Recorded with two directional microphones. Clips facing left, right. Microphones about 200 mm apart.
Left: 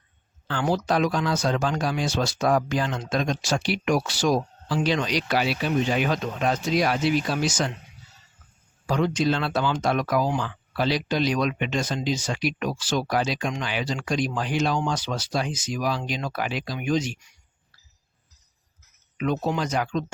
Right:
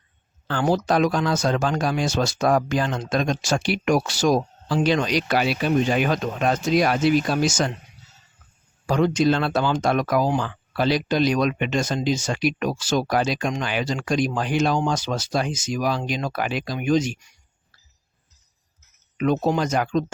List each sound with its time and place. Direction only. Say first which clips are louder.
0.4 s speech: right 3 dB; 45° right (ahead or behind)
8.9 s speech: right 4 dB; 45° right (ahead or behind)
19.1 s speech: right 4 dB; 45° right (ahead or behind)